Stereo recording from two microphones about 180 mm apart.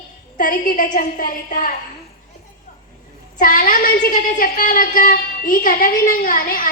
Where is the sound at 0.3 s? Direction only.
50° left (ahead or behind).